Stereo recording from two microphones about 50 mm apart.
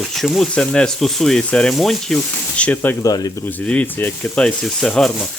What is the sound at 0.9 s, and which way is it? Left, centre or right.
Sizzle, centre.